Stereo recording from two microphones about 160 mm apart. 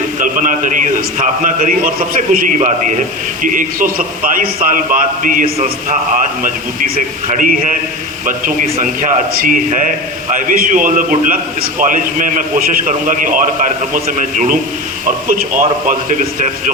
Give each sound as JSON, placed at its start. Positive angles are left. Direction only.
{"t": 0.2, "sound": "a man's voice", "side_deg": -55}
{"t": 3.4, "sound": "a man's voice", "side_deg": -55}